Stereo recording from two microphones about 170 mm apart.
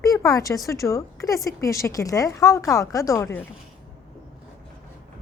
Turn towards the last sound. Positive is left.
turn(degrees=15)  # may be behind; listen again after turning